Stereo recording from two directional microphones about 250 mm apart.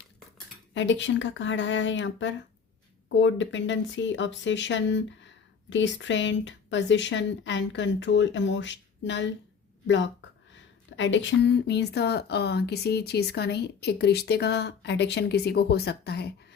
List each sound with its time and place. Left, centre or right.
0.7 s speech: left